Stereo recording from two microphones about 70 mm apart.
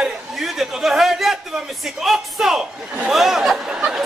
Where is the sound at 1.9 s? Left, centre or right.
Centre.